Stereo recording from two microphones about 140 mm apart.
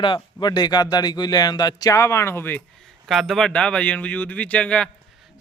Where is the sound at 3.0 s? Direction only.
Centre (ahead or behind).